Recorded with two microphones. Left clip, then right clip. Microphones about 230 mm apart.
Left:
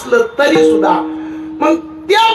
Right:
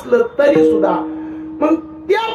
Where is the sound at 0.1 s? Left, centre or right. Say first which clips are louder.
Left 1 dB; left.